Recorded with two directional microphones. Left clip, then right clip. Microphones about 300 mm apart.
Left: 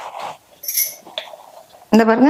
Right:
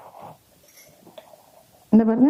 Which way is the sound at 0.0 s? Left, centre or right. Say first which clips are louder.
Left 13 dB; centre.